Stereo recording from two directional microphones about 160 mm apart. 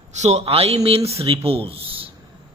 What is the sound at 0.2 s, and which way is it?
A man's voice, 40° right (ahead or behind).